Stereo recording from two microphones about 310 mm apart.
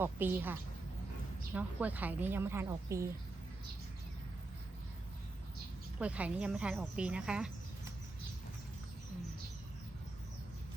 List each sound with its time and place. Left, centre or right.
0.0 s a woman's voice: centre
6.0 s a woman's voice: centre